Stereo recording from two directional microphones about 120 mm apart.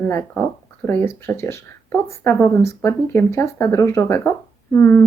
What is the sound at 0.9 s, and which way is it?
Speech, 20° left (ahead or behind).